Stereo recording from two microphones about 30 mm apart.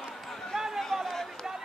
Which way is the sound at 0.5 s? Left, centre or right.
Centre.